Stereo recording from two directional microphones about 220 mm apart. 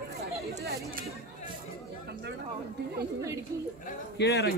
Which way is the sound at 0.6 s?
45° right (ahead or behind).